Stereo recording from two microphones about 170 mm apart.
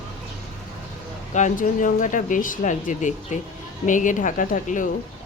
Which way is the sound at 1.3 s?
45° left (ahead or behind).